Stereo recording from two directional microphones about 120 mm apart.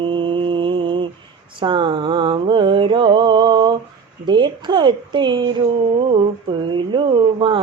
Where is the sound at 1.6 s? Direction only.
40° right (ahead or behind).